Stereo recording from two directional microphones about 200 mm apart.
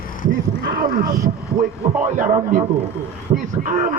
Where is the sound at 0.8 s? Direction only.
45° right (ahead or behind).